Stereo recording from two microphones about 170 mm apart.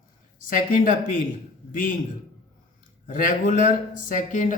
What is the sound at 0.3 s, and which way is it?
Speech, 50° left (ahead or behind).